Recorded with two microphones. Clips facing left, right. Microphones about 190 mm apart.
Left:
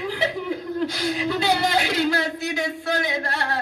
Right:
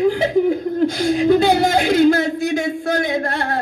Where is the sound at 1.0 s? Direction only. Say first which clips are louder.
Right 10 dB; 50° right (ahead or behind).